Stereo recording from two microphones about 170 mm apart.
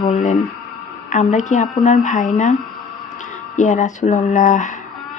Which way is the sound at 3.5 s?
45° left (ahead or behind).